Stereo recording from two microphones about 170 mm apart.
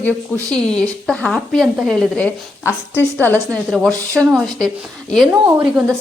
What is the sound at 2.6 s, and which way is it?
A woman's voice, 10° left (ahead or behind).